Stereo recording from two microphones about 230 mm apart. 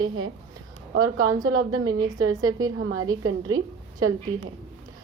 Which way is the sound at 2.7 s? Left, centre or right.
Right.